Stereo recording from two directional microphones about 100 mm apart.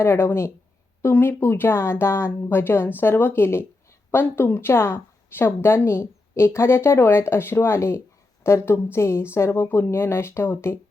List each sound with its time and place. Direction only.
0.0 s a woman's voice: 25° left (ahead or behind)